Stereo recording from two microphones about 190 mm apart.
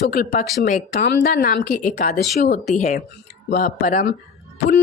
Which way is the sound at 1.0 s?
55° left (ahead or behind).